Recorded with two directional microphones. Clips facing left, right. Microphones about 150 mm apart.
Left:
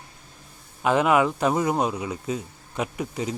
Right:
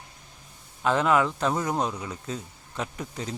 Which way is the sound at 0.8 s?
10° left (ahead or behind).